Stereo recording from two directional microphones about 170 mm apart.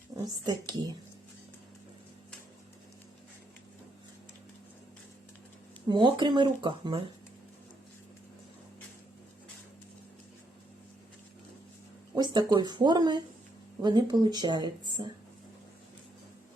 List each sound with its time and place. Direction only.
0.1 s a sound: 20° right (ahead or behind)
0.4 s speech: 25° right (ahead or behind)
5.9 s speech: 25° right (ahead or behind)
12.1 s speech: 25° right (ahead or behind)